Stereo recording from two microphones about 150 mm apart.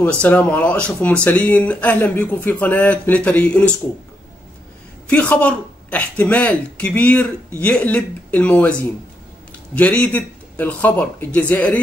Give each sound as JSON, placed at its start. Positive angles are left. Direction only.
{"t": 0.0, "sound": "speech", "side_deg": 10}
{"t": 5.0, "sound": "speech", "side_deg": 10}